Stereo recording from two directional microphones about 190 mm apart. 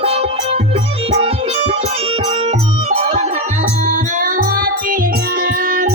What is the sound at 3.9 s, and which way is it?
Music, 45° right (ahead or behind).